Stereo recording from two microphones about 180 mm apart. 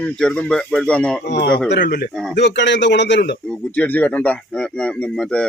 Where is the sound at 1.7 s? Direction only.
75° left (ahead or behind).